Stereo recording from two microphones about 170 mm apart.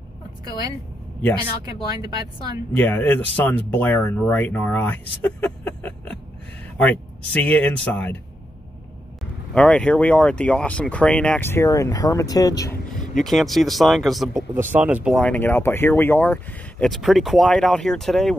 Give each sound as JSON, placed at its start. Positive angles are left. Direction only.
{"t": 0.5, "sound": "speech", "side_deg": -20}
{"t": 2.7, "sound": "speech", "side_deg": 10}
{"t": 5.2, "sound": "a sound", "side_deg": 10}
{"t": 6.8, "sound": "speech", "side_deg": 10}
{"t": 9.5, "sound": "speech", "side_deg": 5}
{"t": 13.1, "sound": "speech", "side_deg": 0}
{"t": 14.3, "sound": "speech", "side_deg": -10}
{"t": 15.1, "sound": "speech", "side_deg": 5}